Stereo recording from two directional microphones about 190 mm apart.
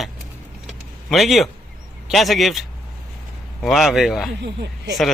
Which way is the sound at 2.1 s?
Centre (ahead or behind).